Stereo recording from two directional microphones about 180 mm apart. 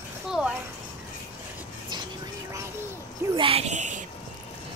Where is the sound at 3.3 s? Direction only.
30° right (ahead or behind).